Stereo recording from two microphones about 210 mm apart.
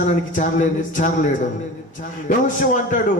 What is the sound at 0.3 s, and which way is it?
Speech, 40° left (ahead or behind).